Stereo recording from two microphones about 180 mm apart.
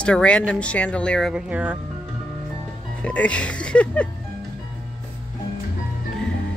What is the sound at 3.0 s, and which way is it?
Speech, 5° left (ahead or behind).